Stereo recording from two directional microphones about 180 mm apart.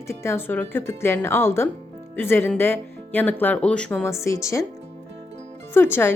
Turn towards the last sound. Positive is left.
turn(degrees=15)  # may be behind; listen again after turning